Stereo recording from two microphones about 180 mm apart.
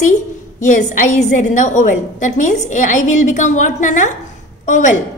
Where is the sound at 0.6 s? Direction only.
45° left (ahead or behind).